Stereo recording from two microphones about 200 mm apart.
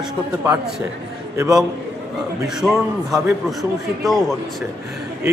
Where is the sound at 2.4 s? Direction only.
Centre (ahead or behind).